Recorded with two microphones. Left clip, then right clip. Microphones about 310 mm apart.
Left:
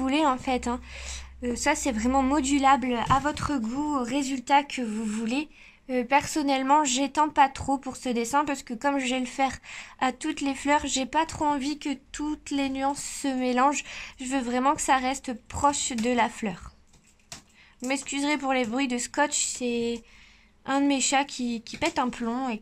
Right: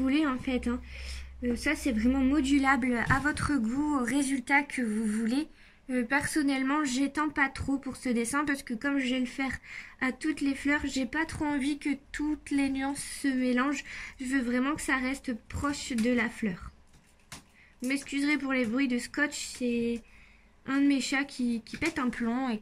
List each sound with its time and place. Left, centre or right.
0.0 s a woman's voice: centre
17.8 s speech: centre